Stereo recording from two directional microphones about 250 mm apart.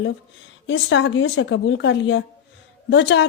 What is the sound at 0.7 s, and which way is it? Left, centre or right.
Speech, left.